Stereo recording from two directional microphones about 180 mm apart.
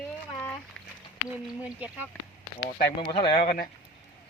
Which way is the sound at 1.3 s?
10° right (ahead or behind).